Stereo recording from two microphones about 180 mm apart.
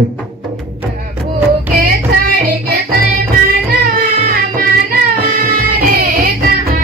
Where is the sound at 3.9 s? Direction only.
55° right (ahead or behind).